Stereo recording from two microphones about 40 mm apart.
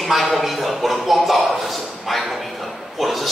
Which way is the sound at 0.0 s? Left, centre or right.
Centre.